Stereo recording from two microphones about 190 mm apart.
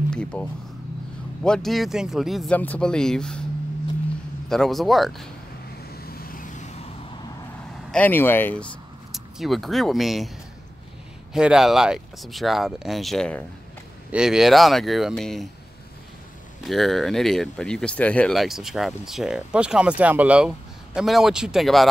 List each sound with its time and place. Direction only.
0.1 s speech: 5° left (ahead or behind)
4.5 s speech: centre (ahead or behind)
5.9 s vehicle: 55° left (ahead or behind)
7.9 s speech: 10° left (ahead or behind)
9.1 s speech: centre (ahead or behind)
11.3 s speech: 5° right (ahead or behind)
16.6 s speech: centre (ahead or behind)